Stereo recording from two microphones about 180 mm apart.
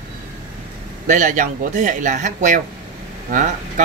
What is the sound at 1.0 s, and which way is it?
Speech, 45° right (ahead or behind).